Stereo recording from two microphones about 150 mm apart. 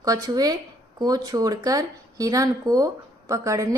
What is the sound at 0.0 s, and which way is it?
Speech, 25° right (ahead or behind).